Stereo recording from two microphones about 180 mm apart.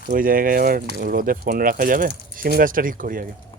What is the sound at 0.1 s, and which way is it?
Speech, 50° right (ahead or behind).